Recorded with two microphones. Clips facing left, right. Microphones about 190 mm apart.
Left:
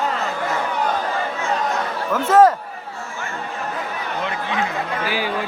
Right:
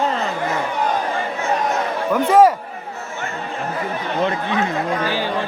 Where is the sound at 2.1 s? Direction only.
10° right (ahead or behind).